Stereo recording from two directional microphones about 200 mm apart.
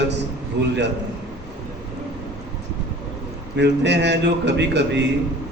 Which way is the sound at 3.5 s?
60° right (ahead or behind).